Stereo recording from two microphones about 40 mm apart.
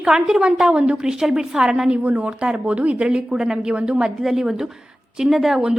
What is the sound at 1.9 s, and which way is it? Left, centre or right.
Speech, right.